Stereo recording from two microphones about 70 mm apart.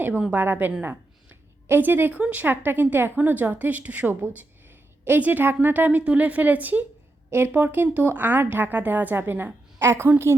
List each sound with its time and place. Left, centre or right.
0.3 s a woman's voice: right
0.8 s a sound: right
2.2 s a woman's voice: right
7.3 s a woman's voice: right
7.5 s a woman's voice: right